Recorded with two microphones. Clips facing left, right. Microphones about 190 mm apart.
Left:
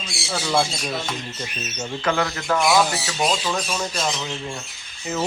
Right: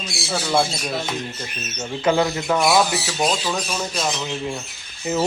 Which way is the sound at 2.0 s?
20° right (ahead or behind).